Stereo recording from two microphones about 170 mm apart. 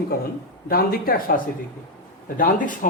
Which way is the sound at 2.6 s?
50° left (ahead or behind).